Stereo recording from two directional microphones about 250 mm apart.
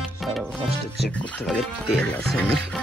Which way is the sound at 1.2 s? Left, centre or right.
Centre.